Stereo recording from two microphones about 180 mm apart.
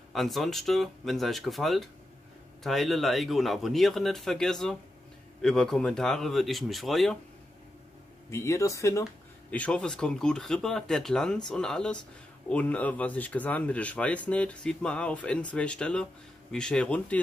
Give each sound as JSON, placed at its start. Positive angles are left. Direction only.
{"t": 0.1, "sound": "speech", "side_deg": 0}
{"t": 8.3, "sound": "speech", "side_deg": 15}
{"t": 9.5, "sound": "speech", "side_deg": 5}